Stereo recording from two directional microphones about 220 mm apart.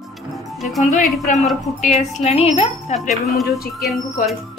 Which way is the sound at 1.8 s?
30° left (ahead or behind).